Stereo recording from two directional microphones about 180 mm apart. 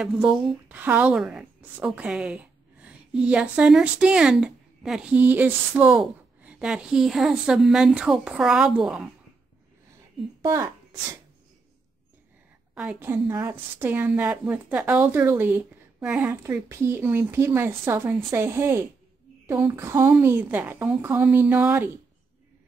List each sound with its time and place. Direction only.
0.0 s a woman's voice: 5° right (ahead or behind)
10.5 s speech: 15° right (ahead or behind)
12.7 s a woman's voice: 10° right (ahead or behind)